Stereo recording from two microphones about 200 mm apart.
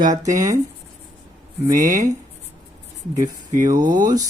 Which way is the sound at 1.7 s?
40° right (ahead or behind).